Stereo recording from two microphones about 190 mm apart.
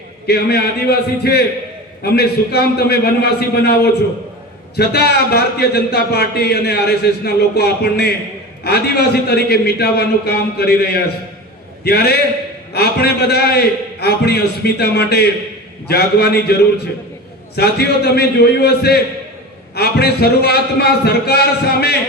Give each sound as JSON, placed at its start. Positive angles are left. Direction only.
{"t": 0.3, "sound": "speech", "side_deg": 55}
{"t": 4.8, "sound": "speech", "side_deg": 60}